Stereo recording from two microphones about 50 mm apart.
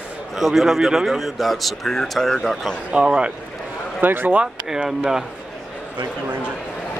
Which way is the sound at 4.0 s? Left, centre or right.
Right.